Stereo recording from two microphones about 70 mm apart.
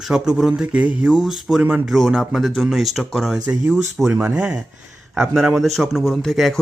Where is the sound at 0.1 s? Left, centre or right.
Centre.